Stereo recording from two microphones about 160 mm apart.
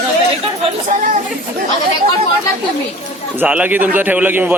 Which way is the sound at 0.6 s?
50° right (ahead or behind).